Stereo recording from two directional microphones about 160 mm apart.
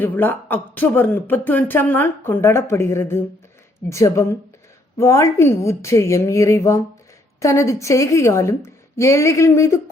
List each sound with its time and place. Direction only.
0.0 s a woman's voice: 10° left (ahead or behind)